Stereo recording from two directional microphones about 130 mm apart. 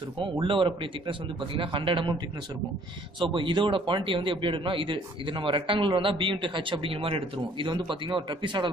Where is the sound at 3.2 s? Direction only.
40° right (ahead or behind).